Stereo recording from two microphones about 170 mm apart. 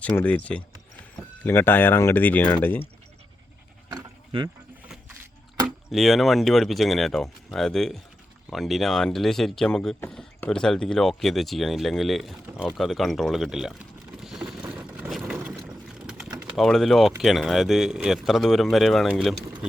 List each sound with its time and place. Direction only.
0.0 s speech: 10° left (ahead or behind)
3.8 s dog: 25° right (ahead or behind)
5.6 s speech: centre (ahead or behind)